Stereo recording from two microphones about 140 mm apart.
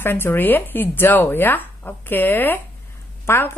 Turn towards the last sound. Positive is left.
turn(degrees=20)  # may be behind; listen again after turning